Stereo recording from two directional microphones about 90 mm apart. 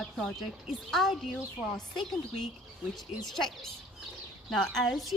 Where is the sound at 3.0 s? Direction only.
5° left (ahead or behind).